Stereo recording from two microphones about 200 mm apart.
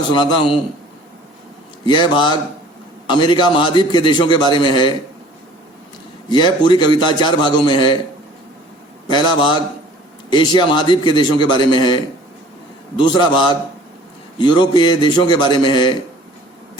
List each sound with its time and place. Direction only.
0.1 s a man's voice: 25° left (ahead or behind)
1.9 s a man's voice: 25° left (ahead or behind)
6.2 s a man's voice: 25° left (ahead or behind)
9.0 s a man's voice: 25° left (ahead or behind)
13.0 s a man's voice: 20° left (ahead or behind)